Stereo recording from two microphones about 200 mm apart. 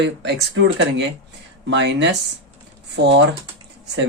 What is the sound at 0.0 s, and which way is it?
Speech, 60° right (ahead or behind).